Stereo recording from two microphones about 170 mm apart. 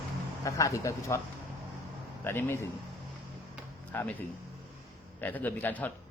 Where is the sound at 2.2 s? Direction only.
10° left (ahead or behind).